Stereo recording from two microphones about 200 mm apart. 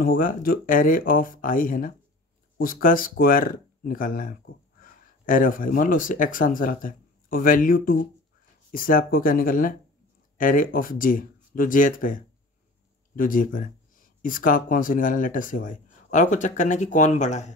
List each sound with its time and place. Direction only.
0.0 s speech: 45° left (ahead or behind)